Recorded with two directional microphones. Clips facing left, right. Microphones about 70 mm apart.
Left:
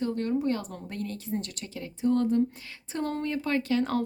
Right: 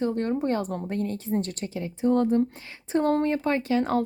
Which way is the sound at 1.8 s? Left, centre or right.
Right.